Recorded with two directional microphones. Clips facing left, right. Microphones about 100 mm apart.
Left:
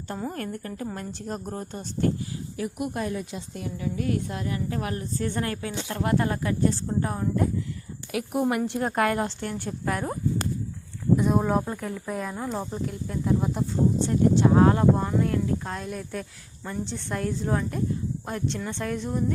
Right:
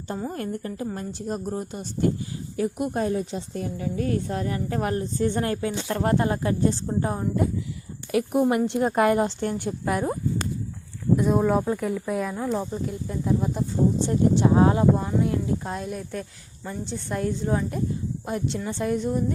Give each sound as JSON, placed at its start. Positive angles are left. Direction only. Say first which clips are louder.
{"t": 0.3, "sound": "a woman's voice", "louder": "right 2 dB", "side_deg": -20}
{"t": 2.6, "sound": "a woman's voice", "louder": "right 5 dB", "side_deg": -30}
{"t": 5.2, "sound": "a woman's voice", "louder": "right 5 dB", "side_deg": -25}
{"t": 6.1, "sound": "a woman's voice", "louder": "right 2 dB", "side_deg": -25}
{"t": 6.8, "sound": "speech", "louder": "right 1 dB", "side_deg": -15}
{"t": 8.3, "sound": "a woman's voice", "louder": "right 2 dB", "side_deg": -25}
{"t": 11.2, "sound": "speech", "louder": "right 4 dB", "side_deg": 0}
{"t": 14.1, "sound": "speech", "louder": "left 1 dB", "side_deg": -15}